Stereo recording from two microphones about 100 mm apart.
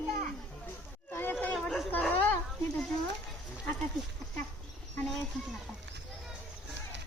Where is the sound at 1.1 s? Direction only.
20° left (ahead or behind).